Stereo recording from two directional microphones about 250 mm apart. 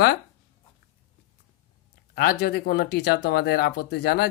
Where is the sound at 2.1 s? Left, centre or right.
Left.